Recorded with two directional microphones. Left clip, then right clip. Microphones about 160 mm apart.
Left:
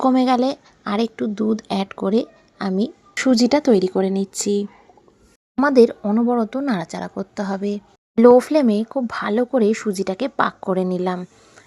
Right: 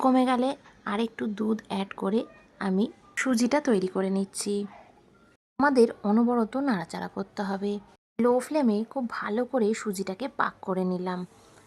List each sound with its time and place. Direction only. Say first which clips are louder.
0.0 s speech: left 6 dB; 20° left (ahead or behind)
5.6 s speech: left 7 dB; 20° left (ahead or behind)
6.0 s speech: left 4 dB; 5° left (ahead or behind)
6.2 s speech: left 6 dB; 15° left (ahead or behind)